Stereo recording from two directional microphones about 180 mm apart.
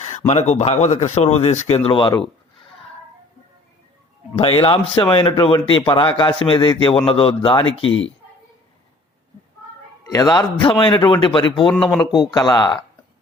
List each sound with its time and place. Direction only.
0.3 s speech: 40° left (ahead or behind)
4.4 s a man's voice: 30° left (ahead or behind)
7.6 s speech: 90° left
10.1 s a man's voice: 20° left (ahead or behind)